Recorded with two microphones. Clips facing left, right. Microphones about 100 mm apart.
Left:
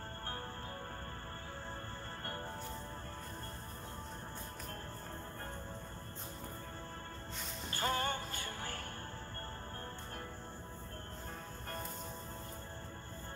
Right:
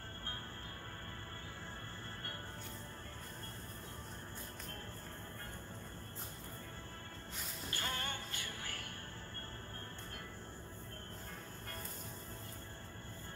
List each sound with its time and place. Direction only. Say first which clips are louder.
7.7 s music: left 8 dB; 35° left (ahead or behind)